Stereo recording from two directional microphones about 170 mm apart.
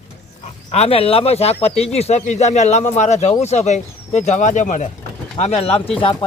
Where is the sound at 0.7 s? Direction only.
35° left (ahead or behind).